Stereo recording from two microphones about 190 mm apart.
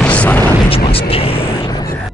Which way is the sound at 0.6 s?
30° left (ahead or behind).